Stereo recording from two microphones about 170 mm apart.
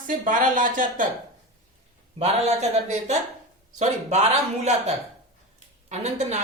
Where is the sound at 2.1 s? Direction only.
40° right (ahead or behind).